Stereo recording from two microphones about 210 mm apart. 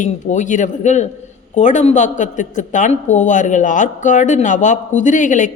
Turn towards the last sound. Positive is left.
turn(degrees=35)  # may be behind; listen again after turning